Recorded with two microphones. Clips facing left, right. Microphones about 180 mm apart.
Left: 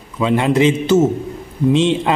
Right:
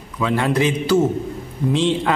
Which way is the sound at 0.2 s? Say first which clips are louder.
Left 5 dB; 20° left (ahead or behind).